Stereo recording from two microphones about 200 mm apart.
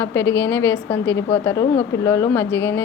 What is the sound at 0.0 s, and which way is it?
A woman's voice, 15° left (ahead or behind).